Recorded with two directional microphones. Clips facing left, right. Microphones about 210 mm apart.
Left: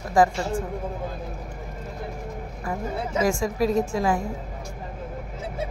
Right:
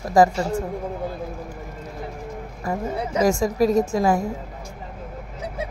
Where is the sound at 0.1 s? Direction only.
40° right (ahead or behind).